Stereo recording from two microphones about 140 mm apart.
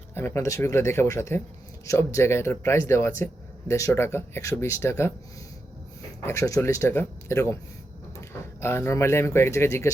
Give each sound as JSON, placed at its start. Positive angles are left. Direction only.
{"t": 0.1, "sound": "speech", "side_deg": 15}
{"t": 6.2, "sound": "speech", "side_deg": 20}
{"t": 8.6, "sound": "speech", "side_deg": 15}